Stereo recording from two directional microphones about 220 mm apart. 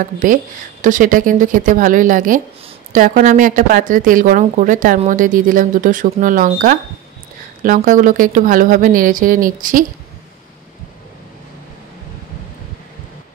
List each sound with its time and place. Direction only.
0.0 s speech: 35° right (ahead or behind)